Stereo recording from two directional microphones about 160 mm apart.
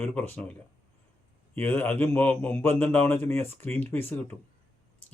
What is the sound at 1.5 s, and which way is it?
Speech, 15° left (ahead or behind).